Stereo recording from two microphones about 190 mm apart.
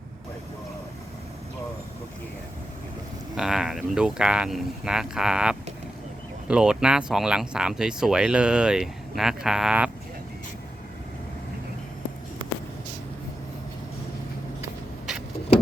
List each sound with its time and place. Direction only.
3.3 s speech: 5° right (ahead or behind)